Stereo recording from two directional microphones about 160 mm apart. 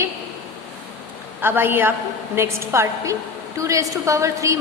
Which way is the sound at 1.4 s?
15° right (ahead or behind).